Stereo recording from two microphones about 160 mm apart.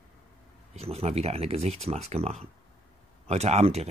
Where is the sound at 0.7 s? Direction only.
40° right (ahead or behind).